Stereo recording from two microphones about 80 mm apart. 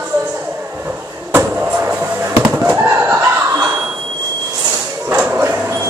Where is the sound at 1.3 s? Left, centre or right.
Right.